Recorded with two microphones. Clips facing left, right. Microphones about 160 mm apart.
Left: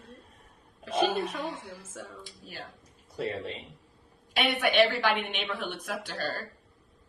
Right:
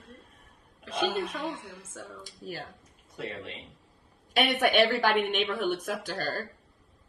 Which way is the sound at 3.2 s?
35° left (ahead or behind).